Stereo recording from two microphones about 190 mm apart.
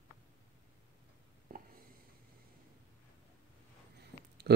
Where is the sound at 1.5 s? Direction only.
50° right (ahead or behind).